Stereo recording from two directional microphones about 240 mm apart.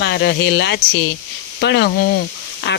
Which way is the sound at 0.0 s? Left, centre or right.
Left.